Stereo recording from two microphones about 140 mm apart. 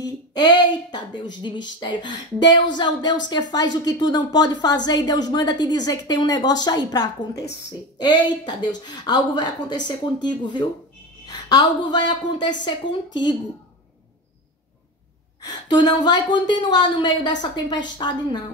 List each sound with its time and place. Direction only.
0.0 s a woman's voice: 30° left (ahead or behind)
15.4 s a woman's voice: 30° left (ahead or behind)